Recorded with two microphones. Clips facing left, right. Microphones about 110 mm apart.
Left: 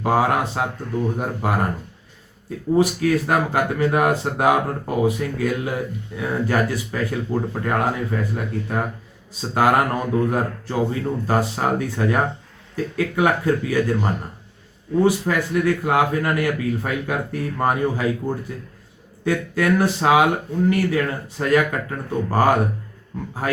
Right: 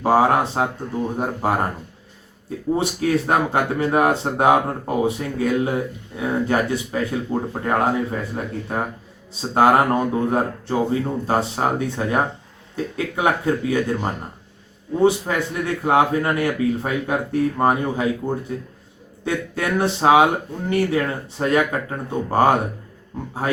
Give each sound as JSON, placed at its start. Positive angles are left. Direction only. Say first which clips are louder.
{"t": 0.0, "sound": "speech", "louder": "right 3 dB", "side_deg": -30}
{"t": 2.7, "sound": "speech", "louder": "left 3 dB", "side_deg": -25}
{"t": 9.6, "sound": "speech", "louder": "right 3 dB", "side_deg": -25}